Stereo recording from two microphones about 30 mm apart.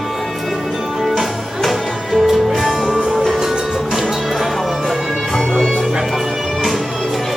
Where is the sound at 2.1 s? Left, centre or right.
Centre.